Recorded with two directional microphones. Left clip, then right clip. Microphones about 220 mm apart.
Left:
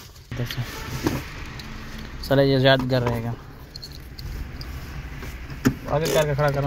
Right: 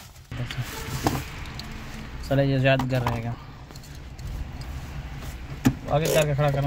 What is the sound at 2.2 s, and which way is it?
Speech, 20° left (ahead or behind).